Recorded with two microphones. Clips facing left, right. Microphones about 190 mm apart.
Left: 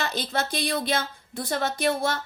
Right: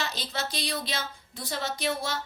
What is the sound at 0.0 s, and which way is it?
A woman's voice, 55° left (ahead or behind).